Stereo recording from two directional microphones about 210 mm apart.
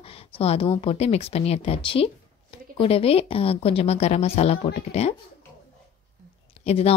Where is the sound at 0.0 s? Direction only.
25° left (ahead or behind).